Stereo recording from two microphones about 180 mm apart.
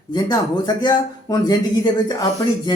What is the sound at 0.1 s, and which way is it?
Speech, 25° left (ahead or behind).